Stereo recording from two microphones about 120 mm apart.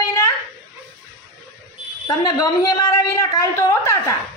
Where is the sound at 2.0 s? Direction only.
30° left (ahead or behind).